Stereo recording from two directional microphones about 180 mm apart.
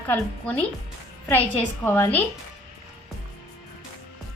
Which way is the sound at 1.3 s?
10° left (ahead or behind).